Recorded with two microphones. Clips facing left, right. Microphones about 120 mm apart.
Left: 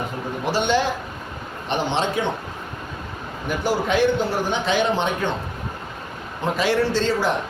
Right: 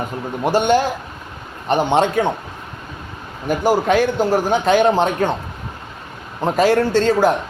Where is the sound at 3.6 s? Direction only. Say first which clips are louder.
Right 4 dB; 45° right (ahead or behind).